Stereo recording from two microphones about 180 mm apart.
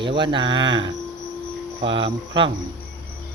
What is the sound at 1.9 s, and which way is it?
Speech, 30° right (ahead or behind).